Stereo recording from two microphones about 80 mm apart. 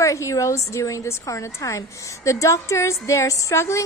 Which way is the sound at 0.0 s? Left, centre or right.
Left.